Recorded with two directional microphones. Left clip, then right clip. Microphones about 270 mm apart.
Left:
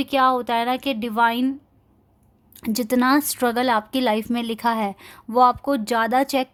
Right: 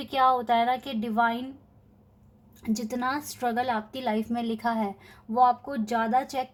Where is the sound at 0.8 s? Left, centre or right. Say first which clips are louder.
Left 6 dB; left.